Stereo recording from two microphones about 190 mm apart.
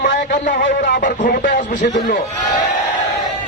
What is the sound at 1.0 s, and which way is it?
Speech, 45° left (ahead or behind).